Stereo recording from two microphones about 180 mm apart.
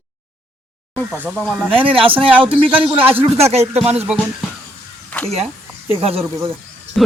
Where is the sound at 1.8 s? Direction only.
30° right (ahead or behind).